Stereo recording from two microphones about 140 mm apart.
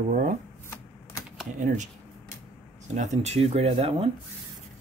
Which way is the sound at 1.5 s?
60° right (ahead or behind).